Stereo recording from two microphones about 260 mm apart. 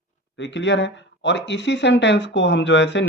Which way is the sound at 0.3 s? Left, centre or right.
Left.